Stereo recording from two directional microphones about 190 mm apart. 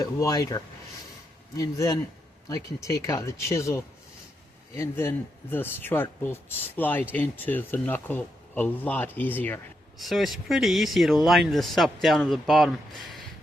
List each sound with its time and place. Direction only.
0.0 s speech: 20° left (ahead or behind); by 13.1 s centre (ahead or behind)